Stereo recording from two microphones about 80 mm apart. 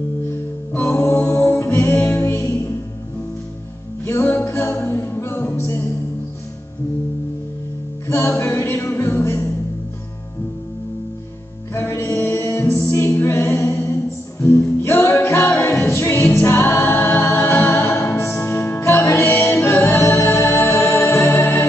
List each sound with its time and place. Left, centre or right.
0.3 s music: left
4.0 s music: left
8.1 s a capella: left
11.7 s music: left
13.2 s a capella: left
14.4 s music: left